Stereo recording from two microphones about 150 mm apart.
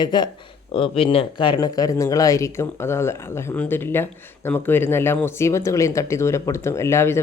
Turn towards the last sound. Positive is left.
turn(degrees=20)  # may be behind; listen again after turning